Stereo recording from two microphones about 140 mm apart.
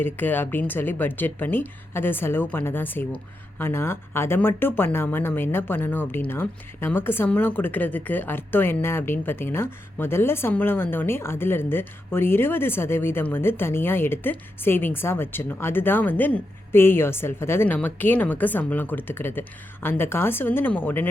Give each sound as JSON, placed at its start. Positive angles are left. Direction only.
{"t": 0.0, "sound": "a woman's voice", "side_deg": 15}